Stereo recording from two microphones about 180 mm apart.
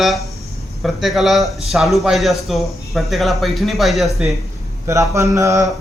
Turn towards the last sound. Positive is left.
turn(degrees=-15)  # may be behind; listen again after turning